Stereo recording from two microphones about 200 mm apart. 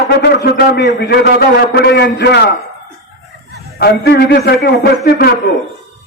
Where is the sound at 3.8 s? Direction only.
55° left (ahead or behind).